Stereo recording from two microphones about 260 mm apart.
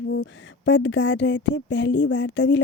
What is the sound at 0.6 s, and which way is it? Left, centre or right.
Speech, left.